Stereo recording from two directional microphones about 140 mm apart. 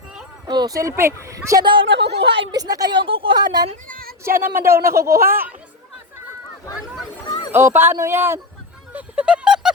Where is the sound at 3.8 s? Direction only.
80° right.